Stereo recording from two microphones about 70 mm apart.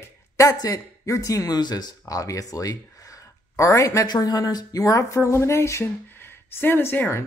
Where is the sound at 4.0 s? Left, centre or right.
Left.